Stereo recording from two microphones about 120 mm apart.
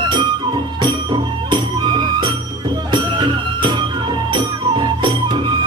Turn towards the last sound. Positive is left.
turn(degrees=-40)  # may be behind; listen again after turning